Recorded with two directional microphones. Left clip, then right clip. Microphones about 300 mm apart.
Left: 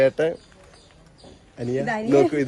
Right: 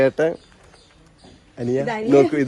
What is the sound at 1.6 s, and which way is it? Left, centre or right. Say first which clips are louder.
Speech: right 3 dB; centre.